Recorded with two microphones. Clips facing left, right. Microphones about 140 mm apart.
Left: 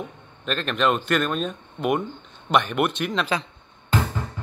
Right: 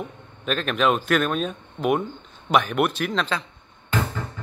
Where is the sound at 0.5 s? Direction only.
5° right (ahead or behind).